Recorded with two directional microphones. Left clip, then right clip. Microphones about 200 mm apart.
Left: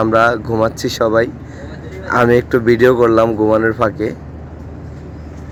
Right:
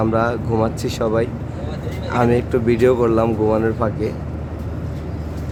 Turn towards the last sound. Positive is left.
turn(degrees=25)  # may be behind; listen again after turning